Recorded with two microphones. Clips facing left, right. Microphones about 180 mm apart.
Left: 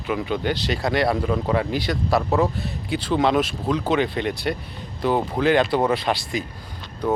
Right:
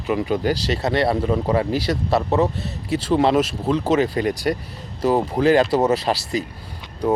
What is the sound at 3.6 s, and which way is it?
Speech, 30° right (ahead or behind).